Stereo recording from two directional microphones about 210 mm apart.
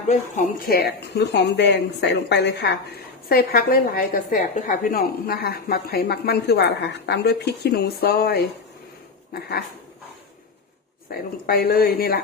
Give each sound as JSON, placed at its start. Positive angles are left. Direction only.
{"t": 0.1, "sound": "speech", "side_deg": 40}
{"t": 11.1, "sound": "speech", "side_deg": 45}